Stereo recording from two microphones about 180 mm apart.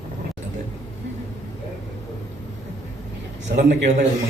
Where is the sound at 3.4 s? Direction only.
70° right (ahead or behind).